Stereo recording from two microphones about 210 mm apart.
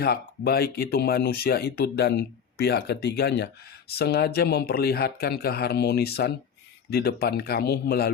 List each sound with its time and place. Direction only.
0.0 s speech: 45° left (ahead or behind)